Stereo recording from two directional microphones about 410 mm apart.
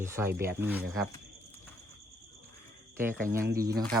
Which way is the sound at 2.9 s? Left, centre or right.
Centre.